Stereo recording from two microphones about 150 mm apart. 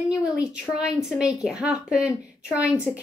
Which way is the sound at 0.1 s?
5° right (ahead or behind).